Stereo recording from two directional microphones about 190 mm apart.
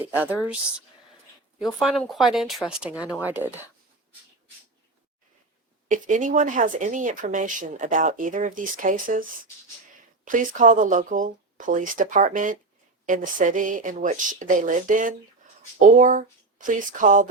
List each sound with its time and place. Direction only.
0.1 s speech: 10° right (ahead or behind)
1.5 s speech: centre (ahead or behind)
5.9 s speech: 40° right (ahead or behind)
10.2 s speech: 45° right (ahead or behind)